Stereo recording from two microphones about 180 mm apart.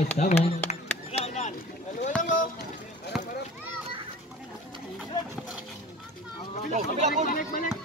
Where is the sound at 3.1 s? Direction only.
Centre (ahead or behind).